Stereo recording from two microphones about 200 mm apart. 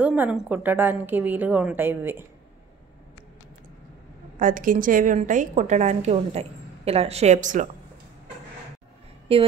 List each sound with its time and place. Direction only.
0.0 s a woman's voice: 5° right (ahead or behind)
4.4 s a woman's voice: 40° right (ahead or behind)
9.3 s a woman's voice: 30° right (ahead or behind)